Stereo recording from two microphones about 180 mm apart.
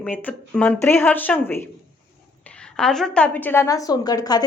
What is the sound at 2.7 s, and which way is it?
A woman's voice, centre (ahead or behind).